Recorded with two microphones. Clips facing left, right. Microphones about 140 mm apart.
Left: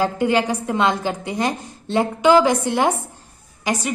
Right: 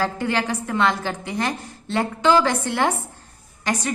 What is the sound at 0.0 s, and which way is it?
A woman's voice, 15° left (ahead or behind).